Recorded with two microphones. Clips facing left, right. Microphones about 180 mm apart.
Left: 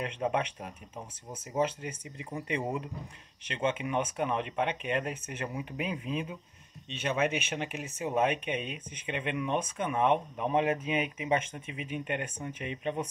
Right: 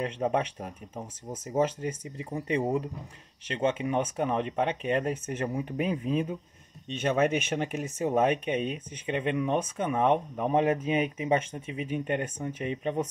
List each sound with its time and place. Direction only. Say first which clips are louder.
0.0 s speech: right 3 dB; 40° right (ahead or behind)